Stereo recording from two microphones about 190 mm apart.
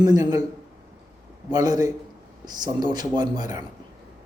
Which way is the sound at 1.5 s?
20° right (ahead or behind).